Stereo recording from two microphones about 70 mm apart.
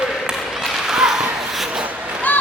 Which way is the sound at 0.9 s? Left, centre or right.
Centre.